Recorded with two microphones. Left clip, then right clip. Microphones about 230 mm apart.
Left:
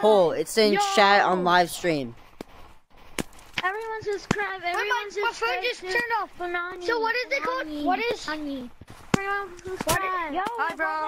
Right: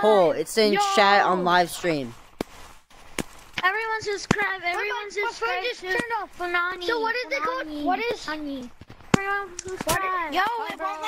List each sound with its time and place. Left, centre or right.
0.0 s speech: centre
3.2 s chop: centre
3.6 s a sound: centre
3.9 s speech: right
4.4 s speech: centre
5.2 s speech: centre
6.4 s speech: right
6.8 s speech: centre
10.3 s speech: right
10.8 s speech: left